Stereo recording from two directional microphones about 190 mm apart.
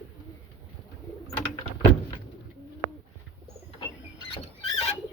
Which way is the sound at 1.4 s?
25° left (ahead or behind).